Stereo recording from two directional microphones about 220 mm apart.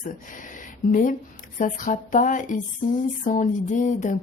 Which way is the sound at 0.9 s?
35° left (ahead or behind).